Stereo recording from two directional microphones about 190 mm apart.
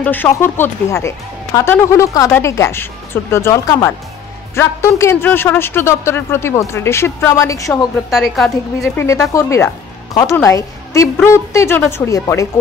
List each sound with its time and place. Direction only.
0.0 s speech: 10° left (ahead or behind)
8.1 s a woman's voice: centre (ahead or behind)
8.9 s a woman's voice: 15° left (ahead or behind)